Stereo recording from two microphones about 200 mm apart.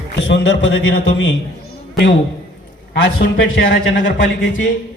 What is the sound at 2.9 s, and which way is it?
A man's voice, 55° left (ahead or behind).